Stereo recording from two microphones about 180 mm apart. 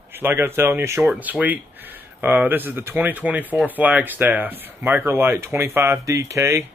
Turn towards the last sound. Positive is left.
turn(degrees=-15)  # may be behind; listen again after turning